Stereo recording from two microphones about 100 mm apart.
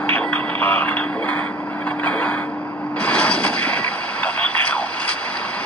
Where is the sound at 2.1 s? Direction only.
10° left (ahead or behind).